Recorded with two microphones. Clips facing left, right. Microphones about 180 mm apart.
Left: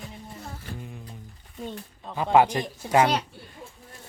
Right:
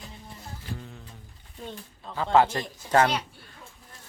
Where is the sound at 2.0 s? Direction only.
15° left (ahead or behind).